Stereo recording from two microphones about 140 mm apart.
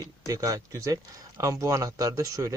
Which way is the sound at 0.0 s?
25° right (ahead or behind).